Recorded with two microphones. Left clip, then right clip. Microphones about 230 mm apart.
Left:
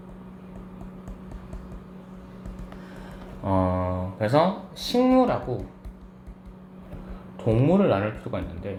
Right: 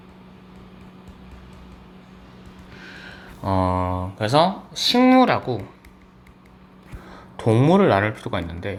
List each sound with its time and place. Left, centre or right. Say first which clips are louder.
3.4 s speech: right 3 dB; right
7.4 s speech: right 5 dB; right